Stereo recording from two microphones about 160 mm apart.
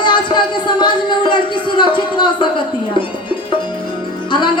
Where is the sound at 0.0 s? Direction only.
30° left (ahead or behind).